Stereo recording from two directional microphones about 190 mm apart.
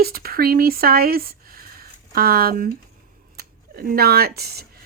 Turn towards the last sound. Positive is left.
turn(degrees=-55)  # may be behind; listen again after turning